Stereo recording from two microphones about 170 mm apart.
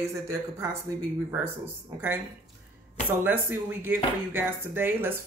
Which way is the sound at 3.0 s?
10° right (ahead or behind).